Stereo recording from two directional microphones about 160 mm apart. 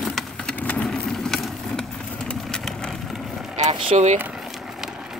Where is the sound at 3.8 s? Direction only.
45° right (ahead or behind).